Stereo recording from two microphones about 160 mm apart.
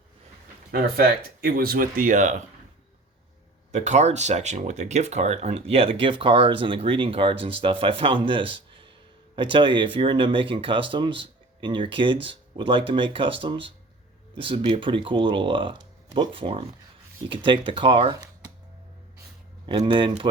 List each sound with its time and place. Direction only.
0.7 s speech: 70° right (ahead or behind); by 2.4 s 50° right (ahead or behind)
3.7 s speech: 50° right (ahead or behind)
19.6 s speech: 30° right (ahead or behind)